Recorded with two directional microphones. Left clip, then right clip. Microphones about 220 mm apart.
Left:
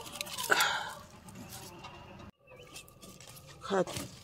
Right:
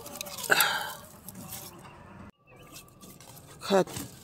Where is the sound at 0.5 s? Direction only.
15° right (ahead or behind).